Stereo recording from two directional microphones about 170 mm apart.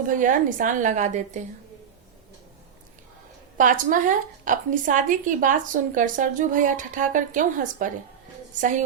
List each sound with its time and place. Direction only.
0.1 s a woman's voice: 50° right (ahead or behind)
3.6 s a woman's voice: 50° right (ahead or behind)